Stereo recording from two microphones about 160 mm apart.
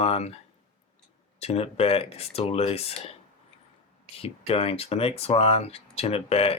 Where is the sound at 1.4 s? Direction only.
40° left (ahead or behind).